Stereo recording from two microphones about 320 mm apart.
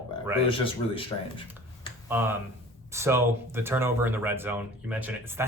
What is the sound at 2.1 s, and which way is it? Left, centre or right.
Speech, centre.